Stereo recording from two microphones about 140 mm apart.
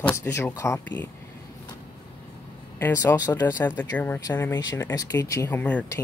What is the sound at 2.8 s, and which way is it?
Speech, 20° left (ahead or behind).